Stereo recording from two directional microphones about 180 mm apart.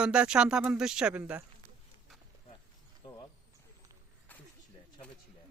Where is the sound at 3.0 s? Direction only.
25° left (ahead or behind).